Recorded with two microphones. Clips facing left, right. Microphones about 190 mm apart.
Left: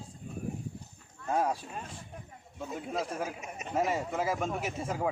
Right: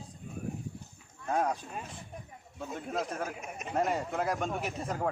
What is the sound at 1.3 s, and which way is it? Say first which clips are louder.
Speech: left 1 dB; 5° left (ahead or behind).